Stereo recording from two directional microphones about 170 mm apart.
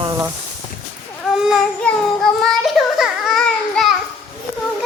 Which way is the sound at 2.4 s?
Centre (ahead or behind).